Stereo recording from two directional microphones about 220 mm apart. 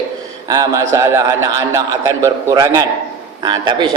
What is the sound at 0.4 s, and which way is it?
Speech, 15° right (ahead or behind).